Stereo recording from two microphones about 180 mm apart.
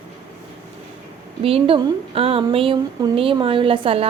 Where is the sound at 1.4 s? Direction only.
30° right (ahead or behind).